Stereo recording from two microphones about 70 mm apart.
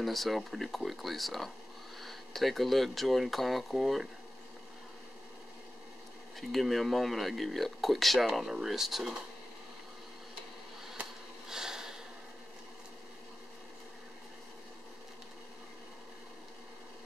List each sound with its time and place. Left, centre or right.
0.0 s speech: centre
6.3 s speech: centre
11.4 s a sound: centre